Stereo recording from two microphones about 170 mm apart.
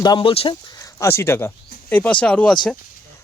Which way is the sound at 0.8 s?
20° left (ahead or behind).